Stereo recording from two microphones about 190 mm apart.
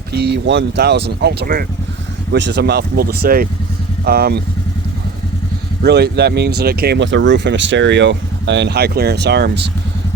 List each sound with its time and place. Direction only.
0.1 s speech: 60° right (ahead or behind)
5.8 s speech: 60° right (ahead or behind)